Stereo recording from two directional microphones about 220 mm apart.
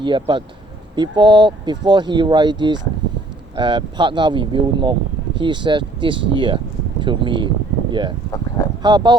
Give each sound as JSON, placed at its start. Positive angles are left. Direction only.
{"t": 0.0, "sound": "speech", "side_deg": -20}